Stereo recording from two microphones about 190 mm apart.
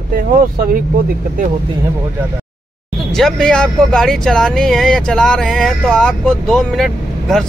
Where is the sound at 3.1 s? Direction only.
5° left (ahead or behind).